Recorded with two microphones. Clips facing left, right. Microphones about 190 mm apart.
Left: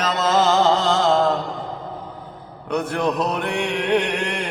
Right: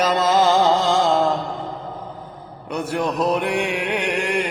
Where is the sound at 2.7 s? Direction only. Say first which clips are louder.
Left 1 dB; 10° right (ahead or behind).